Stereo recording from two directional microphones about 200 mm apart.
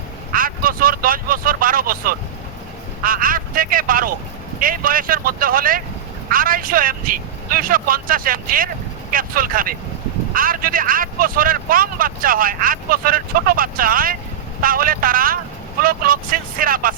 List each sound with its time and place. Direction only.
0.3 s vehicle: 45° right (ahead or behind)
3.0 s speech: 45° right (ahead or behind)